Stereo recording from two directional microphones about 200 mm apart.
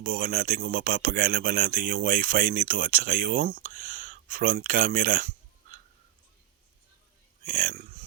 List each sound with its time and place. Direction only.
0.0 s speech: 45° right (ahead or behind)
7.4 s a man's voice: 40° right (ahead or behind)